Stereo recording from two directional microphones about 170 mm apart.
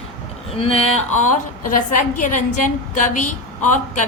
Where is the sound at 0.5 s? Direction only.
35° left (ahead or behind).